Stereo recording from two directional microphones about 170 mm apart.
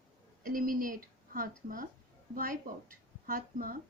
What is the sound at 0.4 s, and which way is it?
Speech, 55° right (ahead or behind).